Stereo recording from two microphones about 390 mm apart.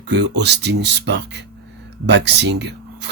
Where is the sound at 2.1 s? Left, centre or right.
Right.